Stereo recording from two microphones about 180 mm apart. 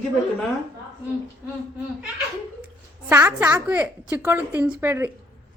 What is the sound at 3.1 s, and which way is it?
Speech, 10° right (ahead or behind).